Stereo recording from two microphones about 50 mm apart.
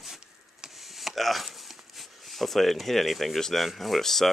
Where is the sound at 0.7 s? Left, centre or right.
Centre.